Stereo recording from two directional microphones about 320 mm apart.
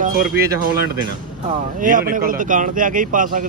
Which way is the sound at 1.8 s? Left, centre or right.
Right.